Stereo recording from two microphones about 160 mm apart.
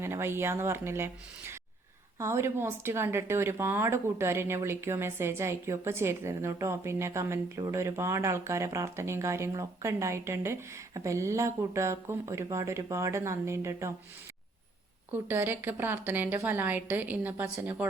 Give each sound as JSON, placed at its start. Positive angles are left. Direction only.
{"t": 0.0, "sound": "a woman's voice", "side_deg": -15}
{"t": 15.1, "sound": "a woman's voice", "side_deg": -10}